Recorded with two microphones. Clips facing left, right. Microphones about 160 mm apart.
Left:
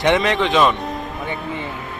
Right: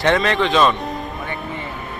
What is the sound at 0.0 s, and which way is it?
Speech, 15° left (ahead or behind).